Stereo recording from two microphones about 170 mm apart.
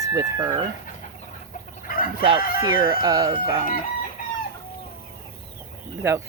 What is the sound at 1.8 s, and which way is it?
Chicken, 60° left (ahead or behind).